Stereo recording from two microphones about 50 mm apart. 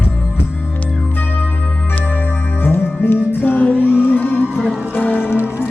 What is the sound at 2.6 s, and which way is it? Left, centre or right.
Music, left.